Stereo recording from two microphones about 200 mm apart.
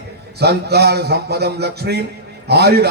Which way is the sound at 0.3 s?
55° right (ahead or behind).